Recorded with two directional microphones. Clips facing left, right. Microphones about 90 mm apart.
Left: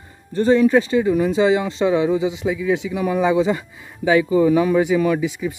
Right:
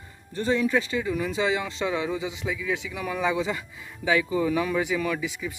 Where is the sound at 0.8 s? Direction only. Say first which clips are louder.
Left 10 dB; 35° left (ahead or behind).